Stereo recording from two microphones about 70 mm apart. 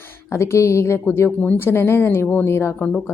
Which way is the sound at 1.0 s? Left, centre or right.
Left.